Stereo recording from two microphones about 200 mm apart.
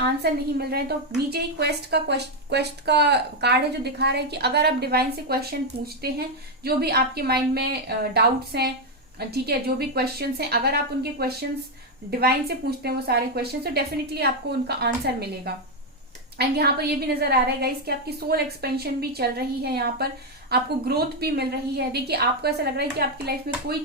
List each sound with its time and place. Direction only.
0.2 s a woman's voice: 55° right (ahead or behind)